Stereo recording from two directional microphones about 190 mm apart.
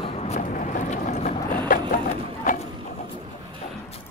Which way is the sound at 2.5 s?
45° left (ahead or behind).